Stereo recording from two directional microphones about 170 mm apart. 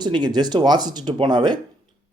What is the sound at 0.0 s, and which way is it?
Speech, 25° right (ahead or behind).